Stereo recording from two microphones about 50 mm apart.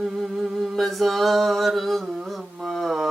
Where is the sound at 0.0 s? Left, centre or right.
Centre.